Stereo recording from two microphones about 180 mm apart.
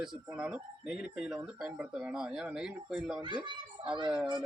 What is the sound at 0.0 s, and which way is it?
Speech, 5° right (ahead or behind).